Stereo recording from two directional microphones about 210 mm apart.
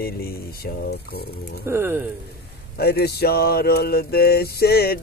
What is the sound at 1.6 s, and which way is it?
Speech, 10° right (ahead or behind).